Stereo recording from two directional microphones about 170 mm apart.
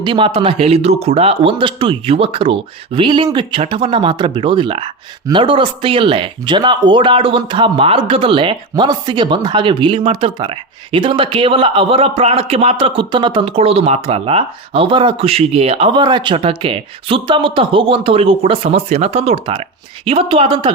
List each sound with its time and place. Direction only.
0.0 s speech: 30° right (ahead or behind)